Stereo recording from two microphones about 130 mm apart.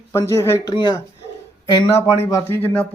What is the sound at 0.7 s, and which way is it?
Speech, 35° left (ahead or behind).